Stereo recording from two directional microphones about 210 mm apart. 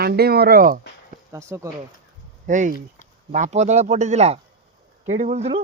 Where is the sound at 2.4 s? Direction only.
35° right (ahead or behind).